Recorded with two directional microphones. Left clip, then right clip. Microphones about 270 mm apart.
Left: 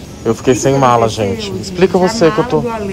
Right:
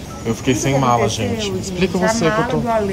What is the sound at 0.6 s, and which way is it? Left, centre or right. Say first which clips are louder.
Speech: left 5 dB; centre.